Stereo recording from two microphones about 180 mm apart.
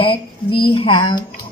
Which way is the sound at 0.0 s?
30° left (ahead or behind).